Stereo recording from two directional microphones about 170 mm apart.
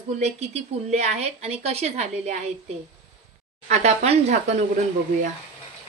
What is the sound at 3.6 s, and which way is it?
Speech, 40° right (ahead or behind).